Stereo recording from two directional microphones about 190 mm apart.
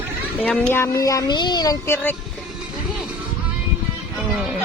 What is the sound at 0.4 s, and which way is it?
A child's voice, 5° left (ahead or behind).